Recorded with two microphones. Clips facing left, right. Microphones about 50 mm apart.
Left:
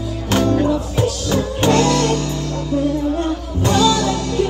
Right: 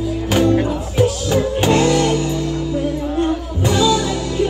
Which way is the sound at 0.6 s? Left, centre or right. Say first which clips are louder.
Even; centre.